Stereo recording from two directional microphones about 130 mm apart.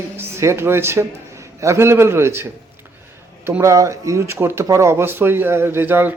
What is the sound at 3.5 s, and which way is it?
Speech, 20° right (ahead or behind).